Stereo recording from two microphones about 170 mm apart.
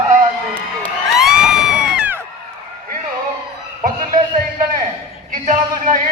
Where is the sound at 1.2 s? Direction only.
5° right (ahead or behind).